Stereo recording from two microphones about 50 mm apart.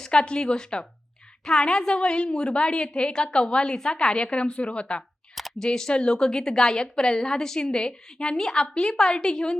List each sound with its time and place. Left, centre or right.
0.0 s a woman's voice: centre
5.3 s a sound: centre
5.5 s a woman's voice: centre